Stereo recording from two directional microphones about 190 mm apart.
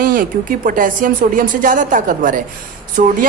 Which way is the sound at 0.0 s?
45° right (ahead or behind).